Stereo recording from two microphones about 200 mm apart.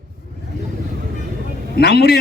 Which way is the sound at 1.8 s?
55° left (ahead or behind).